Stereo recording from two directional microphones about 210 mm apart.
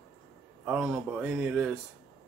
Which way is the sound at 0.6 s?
5° right (ahead or behind).